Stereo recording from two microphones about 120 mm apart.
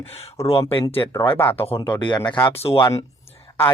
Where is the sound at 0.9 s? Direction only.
20° left (ahead or behind).